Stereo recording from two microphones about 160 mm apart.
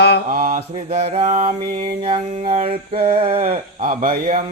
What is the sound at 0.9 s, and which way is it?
Mantra, 45° right (ahead or behind).